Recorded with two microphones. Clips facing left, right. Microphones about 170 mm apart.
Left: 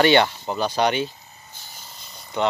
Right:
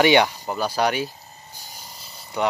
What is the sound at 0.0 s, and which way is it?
Speech, 10° right (ahead or behind).